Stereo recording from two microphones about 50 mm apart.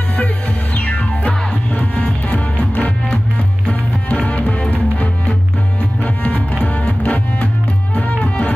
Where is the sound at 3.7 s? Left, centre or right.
Left.